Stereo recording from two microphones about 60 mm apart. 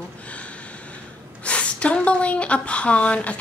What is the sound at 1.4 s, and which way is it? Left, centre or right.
A woman's voice, left.